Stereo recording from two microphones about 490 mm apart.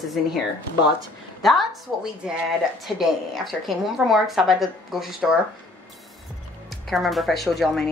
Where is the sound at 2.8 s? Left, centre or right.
Centre.